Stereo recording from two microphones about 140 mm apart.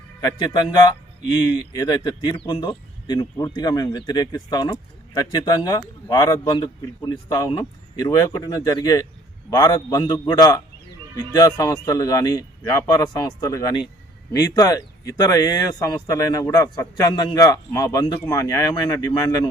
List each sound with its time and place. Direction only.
0.3 s a man's voice: 30° left (ahead or behind)